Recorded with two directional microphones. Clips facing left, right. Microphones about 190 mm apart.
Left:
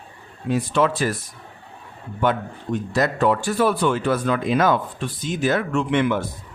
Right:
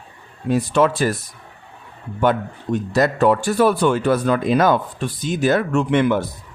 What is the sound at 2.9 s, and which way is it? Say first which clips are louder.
Speech: right 4 dB; 40° right (ahead or behind).